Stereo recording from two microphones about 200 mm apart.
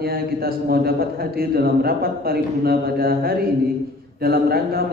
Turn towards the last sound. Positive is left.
turn(degrees=-50)  # may be behind; listen again after turning